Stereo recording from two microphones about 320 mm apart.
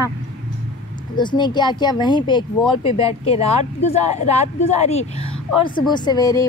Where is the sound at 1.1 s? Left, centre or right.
Centre.